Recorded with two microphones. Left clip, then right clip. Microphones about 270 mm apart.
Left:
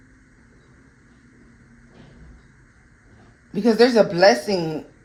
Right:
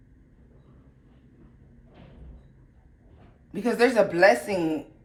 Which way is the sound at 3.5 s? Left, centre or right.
Left.